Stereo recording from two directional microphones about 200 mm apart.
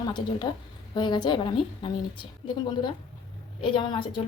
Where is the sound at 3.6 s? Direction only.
25° left (ahead or behind).